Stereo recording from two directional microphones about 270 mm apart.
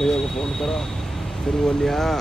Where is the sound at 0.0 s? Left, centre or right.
Centre.